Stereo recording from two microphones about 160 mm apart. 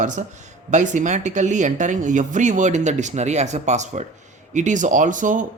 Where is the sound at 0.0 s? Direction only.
50° right (ahead or behind).